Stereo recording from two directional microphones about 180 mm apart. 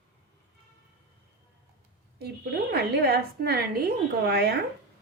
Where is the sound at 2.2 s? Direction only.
65° right (ahead or behind).